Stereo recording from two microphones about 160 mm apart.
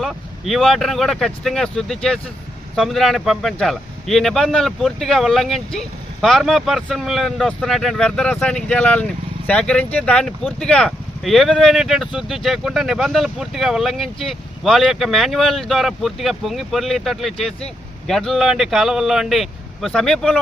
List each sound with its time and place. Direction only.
0.0 s speech: centre (ahead or behind)